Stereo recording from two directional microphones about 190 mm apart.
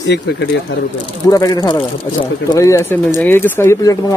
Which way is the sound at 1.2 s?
20° left (ahead or behind).